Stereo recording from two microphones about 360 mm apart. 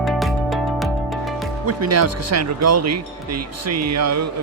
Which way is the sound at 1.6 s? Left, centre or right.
Right.